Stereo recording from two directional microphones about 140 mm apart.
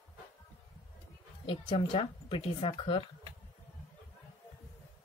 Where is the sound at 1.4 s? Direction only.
40° left (ahead or behind).